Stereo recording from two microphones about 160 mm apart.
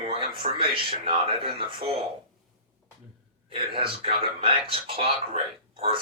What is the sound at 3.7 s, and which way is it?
Speech, 30° right (ahead or behind).